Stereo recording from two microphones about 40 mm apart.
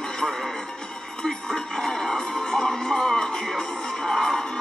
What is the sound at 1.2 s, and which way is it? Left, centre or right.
Music, centre.